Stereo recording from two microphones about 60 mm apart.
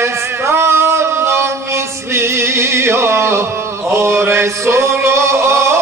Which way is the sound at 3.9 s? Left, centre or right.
Right.